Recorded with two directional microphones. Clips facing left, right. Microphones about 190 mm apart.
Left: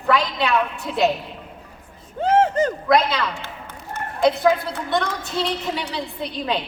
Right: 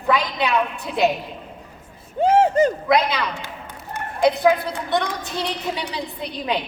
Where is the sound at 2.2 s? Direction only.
10° right (ahead or behind).